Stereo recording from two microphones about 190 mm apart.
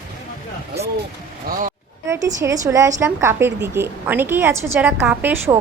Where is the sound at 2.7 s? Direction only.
15° right (ahead or behind).